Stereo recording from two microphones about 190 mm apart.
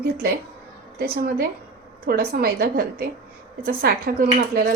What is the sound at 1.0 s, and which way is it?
Speech, 50° right (ahead or behind).